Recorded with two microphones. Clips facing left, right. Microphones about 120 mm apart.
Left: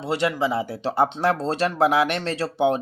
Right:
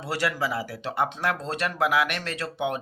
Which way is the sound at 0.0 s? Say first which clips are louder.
Left 5 dB; 20° left (ahead or behind).